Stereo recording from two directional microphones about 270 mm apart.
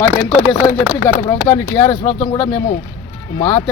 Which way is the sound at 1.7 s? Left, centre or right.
Centre.